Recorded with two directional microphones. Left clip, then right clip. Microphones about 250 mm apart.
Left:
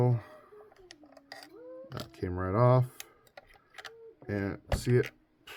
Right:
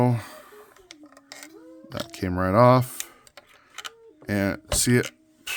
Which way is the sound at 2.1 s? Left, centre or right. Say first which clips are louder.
Right 10 dB; right.